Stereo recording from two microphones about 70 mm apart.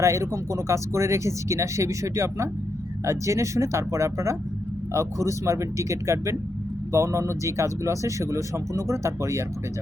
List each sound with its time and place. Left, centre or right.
0.0 s speech: right